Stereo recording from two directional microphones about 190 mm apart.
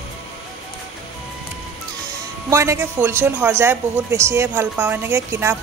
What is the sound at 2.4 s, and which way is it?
A woman's voice, 15° right (ahead or behind).